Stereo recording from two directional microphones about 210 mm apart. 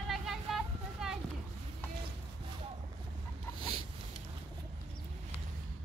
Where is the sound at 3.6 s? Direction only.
25° right (ahead or behind).